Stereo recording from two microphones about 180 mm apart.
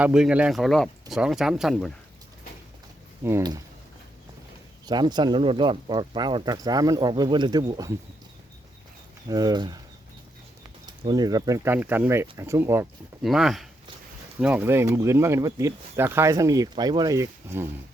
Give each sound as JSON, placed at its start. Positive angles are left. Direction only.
{"t": 0.0, "sound": "speech", "side_deg": -5}
{"t": 3.2, "sound": "speech", "side_deg": -20}
{"t": 4.9, "sound": "speech", "side_deg": -25}
{"t": 9.3, "sound": "speech", "side_deg": -20}
{"t": 10.8, "sound": "speech", "side_deg": -25}
{"t": 13.2, "sound": "speech", "side_deg": 0}